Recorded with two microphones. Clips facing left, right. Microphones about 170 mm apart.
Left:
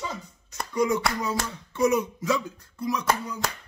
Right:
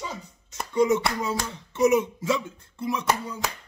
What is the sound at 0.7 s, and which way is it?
Speech, 25° right (ahead or behind).